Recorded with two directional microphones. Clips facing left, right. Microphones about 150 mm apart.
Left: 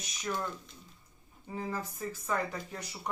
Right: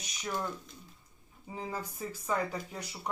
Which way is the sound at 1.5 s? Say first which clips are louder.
Left 2 dB; 10° right (ahead or behind).